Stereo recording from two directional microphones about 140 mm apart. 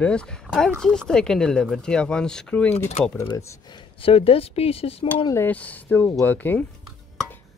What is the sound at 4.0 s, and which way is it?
Speech, 40° left (ahead or behind).